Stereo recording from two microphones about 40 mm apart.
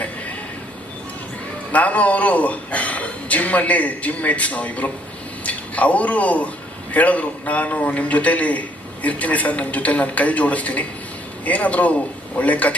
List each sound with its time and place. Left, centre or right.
1.7 s a man's voice: left